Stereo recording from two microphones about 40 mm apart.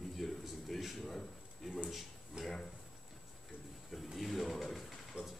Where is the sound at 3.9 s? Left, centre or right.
Centre.